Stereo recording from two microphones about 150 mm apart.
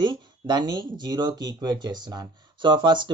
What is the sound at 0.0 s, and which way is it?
Speech, 30° right (ahead or behind).